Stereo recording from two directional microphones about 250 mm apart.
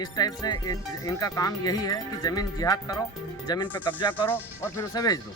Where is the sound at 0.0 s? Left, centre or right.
Centre.